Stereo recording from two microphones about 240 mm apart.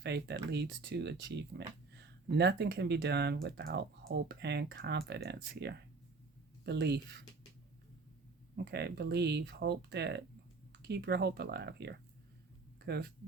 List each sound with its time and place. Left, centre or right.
0.0 s speech: right
8.5 s speech: right